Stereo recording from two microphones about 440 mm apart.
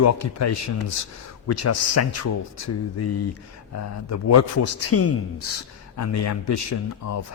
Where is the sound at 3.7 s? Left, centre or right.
Left.